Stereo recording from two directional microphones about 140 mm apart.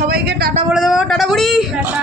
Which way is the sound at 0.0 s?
90° right.